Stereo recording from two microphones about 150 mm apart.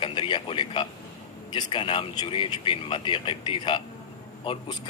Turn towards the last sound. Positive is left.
turn(degrees=35)  # may be behind; listen again after turning